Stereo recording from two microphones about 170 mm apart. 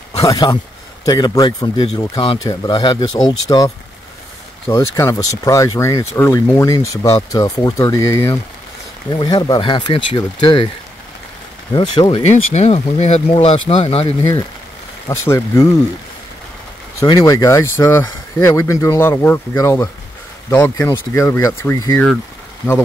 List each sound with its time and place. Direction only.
0.3 s speech: 20° left (ahead or behind)
11.7 s speech: 25° left (ahead or behind)
12.3 s speech: 40° left (ahead or behind)
15.0 s speech: 20° left (ahead or behind)
17.0 s speech: 20° left (ahead or behind)